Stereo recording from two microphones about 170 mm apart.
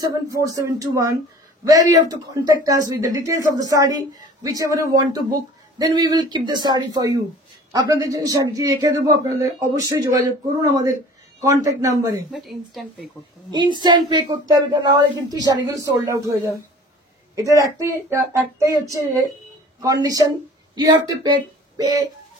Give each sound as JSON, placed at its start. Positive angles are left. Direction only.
{"t": 0.0, "sound": "speech", "side_deg": -20}
{"t": 12.3, "sound": "a woman's voice", "side_deg": 0}
{"t": 13.5, "sound": "speech", "side_deg": -25}
{"t": 17.4, "sound": "speech", "side_deg": -20}